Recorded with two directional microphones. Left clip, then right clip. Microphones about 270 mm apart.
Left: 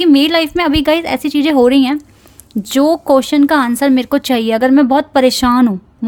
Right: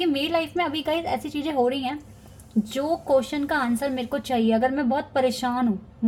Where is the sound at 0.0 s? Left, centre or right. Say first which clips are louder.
Left 13 dB; left.